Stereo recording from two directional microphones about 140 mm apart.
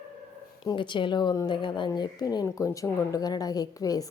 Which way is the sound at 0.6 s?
35° left (ahead or behind).